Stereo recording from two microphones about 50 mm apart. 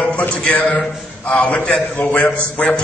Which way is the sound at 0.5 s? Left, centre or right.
Left.